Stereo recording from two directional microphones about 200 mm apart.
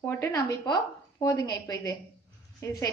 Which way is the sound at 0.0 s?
15° left (ahead or behind).